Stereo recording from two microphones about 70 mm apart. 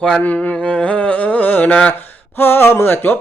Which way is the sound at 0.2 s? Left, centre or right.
Left.